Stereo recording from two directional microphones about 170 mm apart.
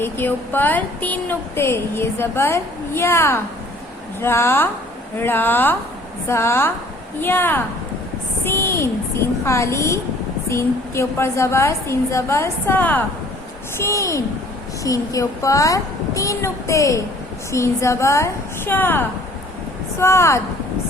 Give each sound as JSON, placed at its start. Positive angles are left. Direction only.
{"t": 0.0, "sound": "a woman's voice", "side_deg": 10}